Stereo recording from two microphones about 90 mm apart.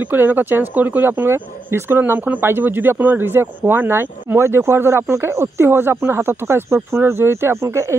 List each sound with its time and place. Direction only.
0.0 s speech: 20° right (ahead or behind)